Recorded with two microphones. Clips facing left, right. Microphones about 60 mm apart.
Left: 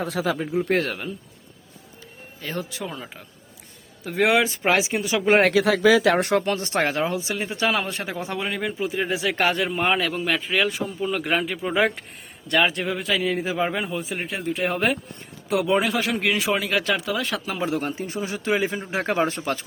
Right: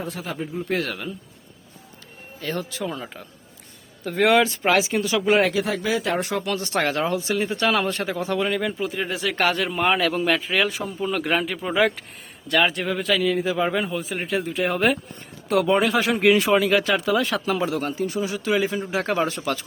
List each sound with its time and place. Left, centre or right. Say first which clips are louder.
0.0 s speech: left 5 dB; left
0.7 s speech: right 1 dB; left
2.4 s speech: right 2 dB; centre
2.9 s speech: right 3 dB; centre
4.4 s a man's voice: right 1 dB; centre
5.4 s speech: left 4 dB; left
6.4 s speech: left 1 dB; left; by 13.2 s centre
13.2 s a man's voice: right 2 dB; left
13.7 s speech: right 2 dB; centre
17.7 s a man's voice: right 1 dB; left